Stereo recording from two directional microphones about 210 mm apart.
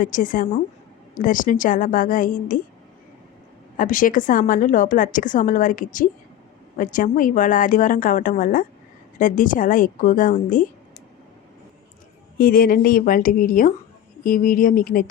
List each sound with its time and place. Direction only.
0.0 s a woman's voice: 40° left (ahead or behind)
3.8 s a woman's voice: 40° left (ahead or behind)
12.4 s a woman's voice: 45° left (ahead or behind)